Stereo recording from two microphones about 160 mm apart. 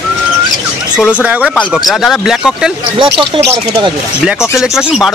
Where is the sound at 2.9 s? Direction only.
30° right (ahead or behind).